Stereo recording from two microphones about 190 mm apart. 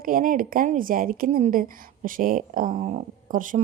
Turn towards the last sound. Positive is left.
turn(degrees=-45)  # may be behind; listen again after turning